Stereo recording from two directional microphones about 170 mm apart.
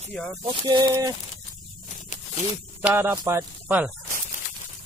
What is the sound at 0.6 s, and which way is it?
Speech, 20° right (ahead or behind).